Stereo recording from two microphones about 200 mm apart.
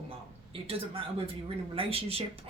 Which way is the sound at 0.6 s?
30° right (ahead or behind).